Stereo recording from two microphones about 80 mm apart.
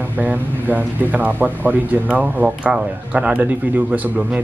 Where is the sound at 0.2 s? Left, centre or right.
Right.